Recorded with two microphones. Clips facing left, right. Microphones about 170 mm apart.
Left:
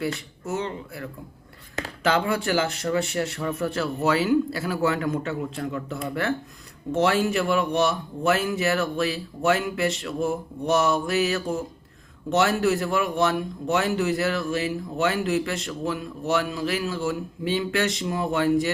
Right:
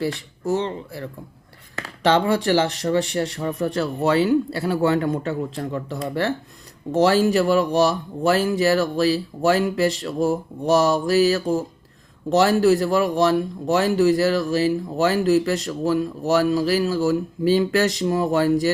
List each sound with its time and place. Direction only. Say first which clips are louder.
0.0 s speech: right 4 dB; 35° right (ahead or behind)
2.0 s speech: right 5 dB; 30° right (ahead or behind)